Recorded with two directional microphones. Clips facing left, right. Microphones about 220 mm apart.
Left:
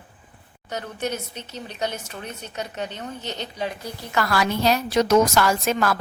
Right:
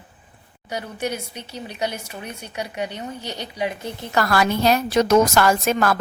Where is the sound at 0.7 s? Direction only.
10° right (ahead or behind).